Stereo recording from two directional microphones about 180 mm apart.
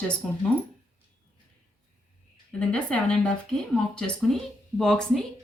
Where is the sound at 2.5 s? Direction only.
5° left (ahead or behind).